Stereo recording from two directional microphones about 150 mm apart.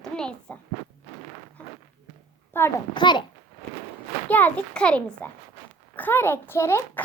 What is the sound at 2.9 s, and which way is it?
Speech, 30° left (ahead or behind).